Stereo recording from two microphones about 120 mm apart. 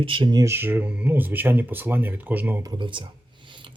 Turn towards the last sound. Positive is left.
turn(degrees=-45)  # may be behind; listen again after turning